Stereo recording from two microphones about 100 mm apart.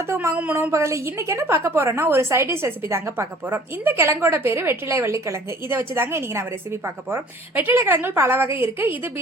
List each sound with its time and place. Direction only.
0.0 s a woman's voice: 30° right (ahead or behind)